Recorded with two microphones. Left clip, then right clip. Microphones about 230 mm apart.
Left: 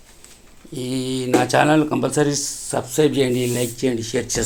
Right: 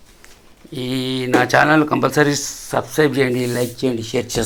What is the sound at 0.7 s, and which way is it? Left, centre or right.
Speech, centre.